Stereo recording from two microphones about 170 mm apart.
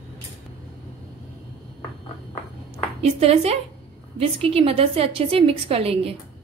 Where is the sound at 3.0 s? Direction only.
35° right (ahead or behind).